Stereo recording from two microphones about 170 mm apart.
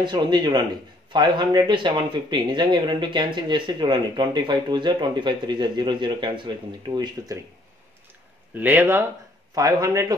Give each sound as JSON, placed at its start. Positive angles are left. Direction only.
{"t": 0.0, "sound": "speech", "side_deg": -25}
{"t": 8.5, "sound": "speech", "side_deg": -10}